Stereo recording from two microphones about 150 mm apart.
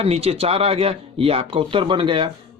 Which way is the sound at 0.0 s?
40° right (ahead or behind).